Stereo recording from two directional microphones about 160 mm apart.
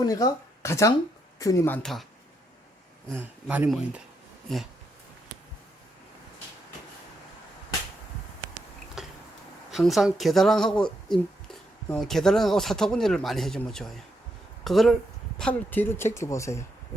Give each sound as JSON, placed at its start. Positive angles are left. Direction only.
{"t": 0.0, "sound": "speech", "side_deg": 20}
{"t": 3.4, "sound": "speech", "side_deg": -5}
{"t": 4.5, "sound": "speech", "side_deg": 0}
{"t": 9.0, "sound": "tick-tock", "side_deg": -5}
{"t": 9.7, "sound": "speech", "side_deg": 0}